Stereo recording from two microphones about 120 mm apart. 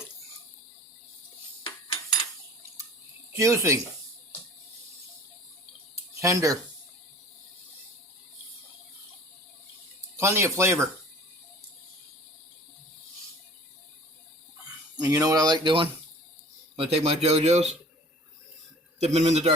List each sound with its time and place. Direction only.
3.3 s speech: 25° right (ahead or behind)
6.1 s speech: 25° right (ahead or behind)
10.2 s speech: 20° right (ahead or behind)
15.0 s speech: 30° right (ahead or behind)
16.7 s speech: 55° right (ahead or behind)
18.9 s speech: 65° right (ahead or behind)